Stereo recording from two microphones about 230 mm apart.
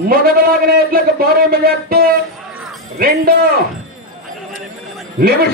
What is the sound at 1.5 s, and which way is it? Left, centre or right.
Speech, right.